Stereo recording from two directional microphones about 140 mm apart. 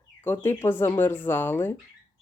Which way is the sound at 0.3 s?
15° left (ahead or behind).